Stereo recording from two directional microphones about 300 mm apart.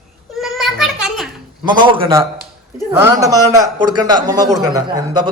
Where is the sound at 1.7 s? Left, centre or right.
Centre.